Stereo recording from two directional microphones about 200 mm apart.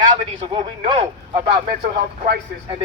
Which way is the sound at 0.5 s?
25° right (ahead or behind).